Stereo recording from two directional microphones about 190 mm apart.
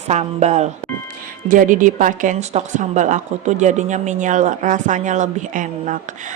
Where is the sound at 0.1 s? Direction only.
35° right (ahead or behind).